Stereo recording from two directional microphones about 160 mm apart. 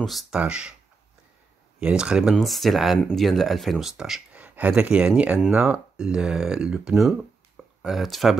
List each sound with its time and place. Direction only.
0.0 s speech: 5° right (ahead or behind)
1.8 s speech: 5° right (ahead or behind)